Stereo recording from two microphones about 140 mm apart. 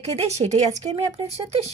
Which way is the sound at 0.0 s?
50° right (ahead or behind).